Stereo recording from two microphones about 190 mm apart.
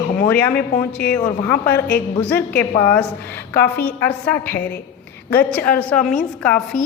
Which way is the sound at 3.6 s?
55° left (ahead or behind).